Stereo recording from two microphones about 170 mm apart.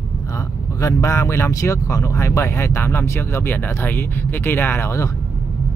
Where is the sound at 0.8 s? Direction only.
20° left (ahead or behind).